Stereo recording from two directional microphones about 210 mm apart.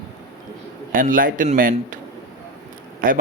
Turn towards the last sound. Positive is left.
turn(degrees=-40)  # may be behind; listen again after turning